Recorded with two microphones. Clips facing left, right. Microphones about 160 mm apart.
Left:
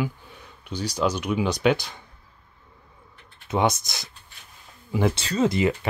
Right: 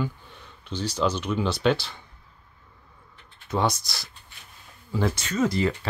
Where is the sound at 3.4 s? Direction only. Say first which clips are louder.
Left 2 dB; 20° left (ahead or behind).